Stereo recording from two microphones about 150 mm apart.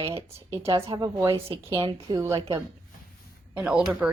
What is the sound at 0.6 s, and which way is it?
Speech, 15° right (ahead or behind).